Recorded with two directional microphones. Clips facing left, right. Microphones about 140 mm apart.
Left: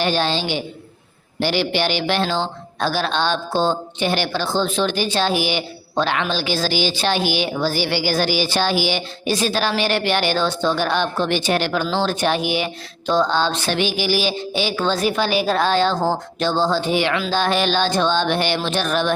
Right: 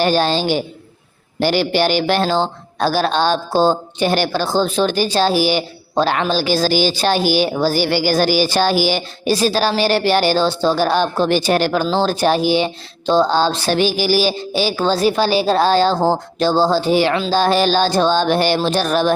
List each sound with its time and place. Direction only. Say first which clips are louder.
0.0 s a woman's voice: right 4 dB; 40° right (ahead or behind)